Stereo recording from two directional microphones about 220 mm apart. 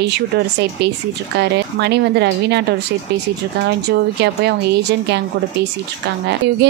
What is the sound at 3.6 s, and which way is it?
Speech, 50° right (ahead or behind).